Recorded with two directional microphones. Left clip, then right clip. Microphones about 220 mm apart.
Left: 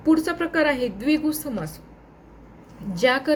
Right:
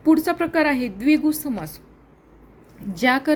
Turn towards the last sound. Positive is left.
turn(degrees=-40)  # may be behind; listen again after turning